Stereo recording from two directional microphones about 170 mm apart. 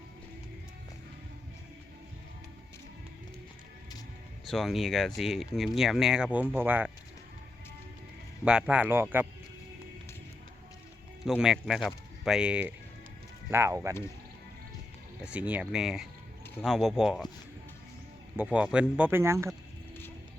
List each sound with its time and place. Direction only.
4.4 s speech: centre (ahead or behind)
8.4 s speech: 5° right (ahead or behind)
11.3 s speech: 5° right (ahead or behind)
15.2 s speech: 10° right (ahead or behind)
18.3 s speech: 5° right (ahead or behind)